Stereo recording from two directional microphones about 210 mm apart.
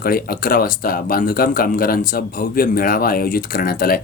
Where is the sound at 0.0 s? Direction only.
45° left (ahead or behind).